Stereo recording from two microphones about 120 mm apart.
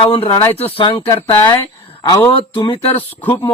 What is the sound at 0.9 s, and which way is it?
Speech, 35° left (ahead or behind).